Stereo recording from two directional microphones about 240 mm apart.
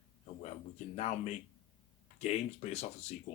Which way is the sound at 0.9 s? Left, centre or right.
Left.